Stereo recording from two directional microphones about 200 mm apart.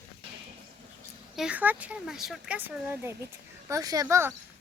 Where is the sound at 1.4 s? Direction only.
5° right (ahead or behind).